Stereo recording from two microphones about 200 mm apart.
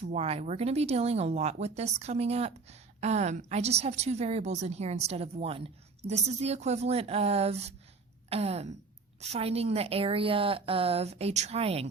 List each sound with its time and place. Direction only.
0.1 s speech: 30° right (ahead or behind)